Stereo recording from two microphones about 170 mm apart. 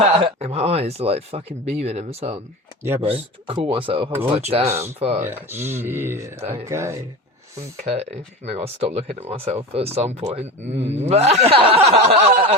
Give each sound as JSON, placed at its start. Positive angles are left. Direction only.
{"t": 0.0, "sound": "speech", "side_deg": -40}
{"t": 5.2, "sound": "speech", "side_deg": -15}
{"t": 7.9, "sound": "speech", "side_deg": -40}